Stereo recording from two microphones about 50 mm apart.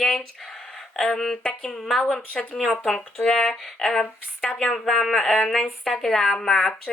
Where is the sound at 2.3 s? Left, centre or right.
Centre.